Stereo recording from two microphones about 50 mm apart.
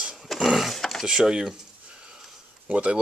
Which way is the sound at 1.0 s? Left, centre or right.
Centre.